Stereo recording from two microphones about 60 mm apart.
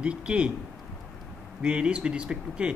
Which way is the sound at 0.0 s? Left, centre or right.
Centre.